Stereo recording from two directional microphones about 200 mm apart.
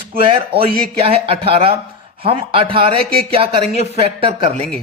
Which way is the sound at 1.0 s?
30° right (ahead or behind).